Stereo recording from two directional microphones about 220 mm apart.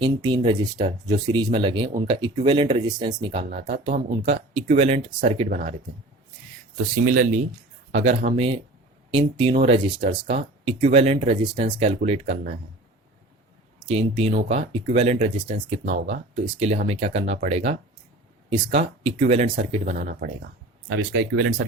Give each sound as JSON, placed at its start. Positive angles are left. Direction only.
{"t": 0.0, "sound": "speech", "side_deg": -20}
{"t": 7.0, "sound": "speech", "side_deg": -35}
{"t": 13.7, "sound": "speech", "side_deg": -25}
{"t": 21.1, "sound": "speech", "side_deg": -50}